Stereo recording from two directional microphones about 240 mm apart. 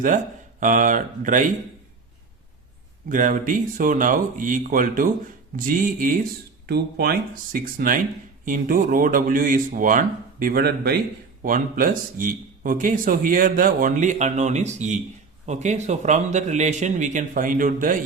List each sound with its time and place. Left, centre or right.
0.6 s speech: right
3.1 s a man's voice: right